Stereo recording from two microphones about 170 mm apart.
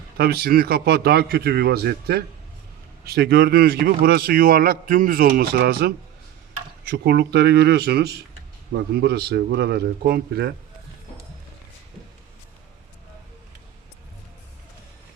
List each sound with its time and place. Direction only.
0.2 s speech: 70° right (ahead or behind)
6.9 s speech: 75° right (ahead or behind)